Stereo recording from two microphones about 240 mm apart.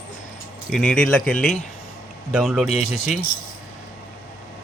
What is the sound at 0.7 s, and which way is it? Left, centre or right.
Speech, centre.